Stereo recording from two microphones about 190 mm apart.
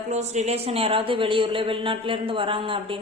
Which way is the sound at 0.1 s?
35° right (ahead or behind).